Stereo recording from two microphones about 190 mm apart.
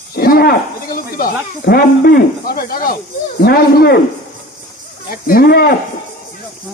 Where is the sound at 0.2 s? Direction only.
55° left (ahead or behind).